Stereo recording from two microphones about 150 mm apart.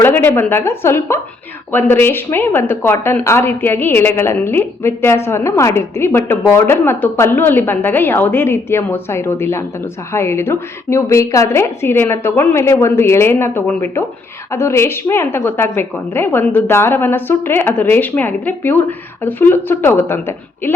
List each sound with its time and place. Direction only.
0.0 s a woman's voice: 15° left (ahead or behind)